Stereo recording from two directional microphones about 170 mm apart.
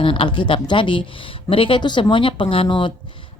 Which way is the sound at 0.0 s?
30° left (ahead or behind).